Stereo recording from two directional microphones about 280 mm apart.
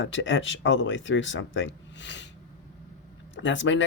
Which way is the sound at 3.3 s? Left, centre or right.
Left.